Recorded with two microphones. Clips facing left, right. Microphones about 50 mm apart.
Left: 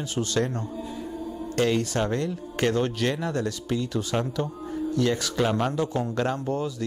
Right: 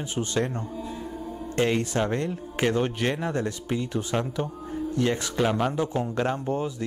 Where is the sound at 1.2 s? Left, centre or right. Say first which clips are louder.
Even; right.